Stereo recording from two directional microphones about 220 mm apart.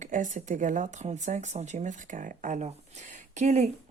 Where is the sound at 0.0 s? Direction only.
35° right (ahead or behind).